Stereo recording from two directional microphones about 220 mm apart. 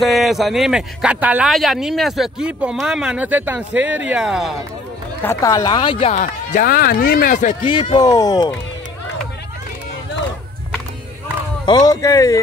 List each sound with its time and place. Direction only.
0.0 s speech: centre (ahead or behind)
5.2 s speech: 15° left (ahead or behind)
6.1 s speech: 40° left (ahead or behind)
7.6 s speech: 20° left (ahead or behind)
11.6 s speech: 20° left (ahead or behind)